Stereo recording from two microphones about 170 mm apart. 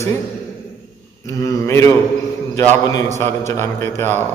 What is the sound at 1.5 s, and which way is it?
Speech, 15° left (ahead or behind).